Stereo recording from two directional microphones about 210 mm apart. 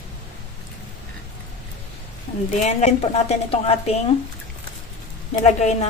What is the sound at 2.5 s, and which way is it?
A woman's voice, 35° left (ahead or behind).